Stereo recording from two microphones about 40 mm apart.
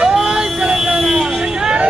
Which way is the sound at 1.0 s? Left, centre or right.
Centre.